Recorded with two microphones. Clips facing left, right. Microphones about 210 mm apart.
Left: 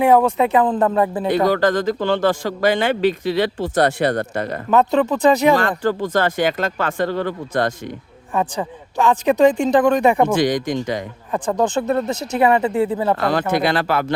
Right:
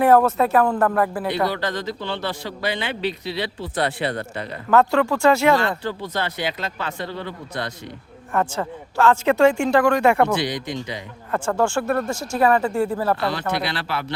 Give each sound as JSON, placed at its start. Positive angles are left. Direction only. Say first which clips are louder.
{"t": 0.0, "sound": "speech", "louder": "left 1 dB", "side_deg": 15}
{"t": 1.5, "sound": "a man's voice", "louder": "left 8 dB", "side_deg": 45}
{"t": 4.7, "sound": "speech", "louder": "left 1 dB", "side_deg": 20}
{"t": 5.5, "sound": "a man's voice", "louder": "left 5 dB", "side_deg": 45}
{"t": 8.3, "sound": "speech", "louder": "left 1 dB", "side_deg": 15}
{"t": 10.2, "sound": "a man's voice", "louder": "left 6 dB", "side_deg": 50}
{"t": 11.3, "sound": "speech", "louder": "left 1 dB", "side_deg": 15}
{"t": 13.1, "sound": "a man's voice", "louder": "left 5 dB", "side_deg": 45}